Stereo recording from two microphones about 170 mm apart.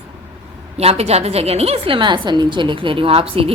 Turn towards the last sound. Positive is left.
turn(degrees=-35)  # may be behind; listen again after turning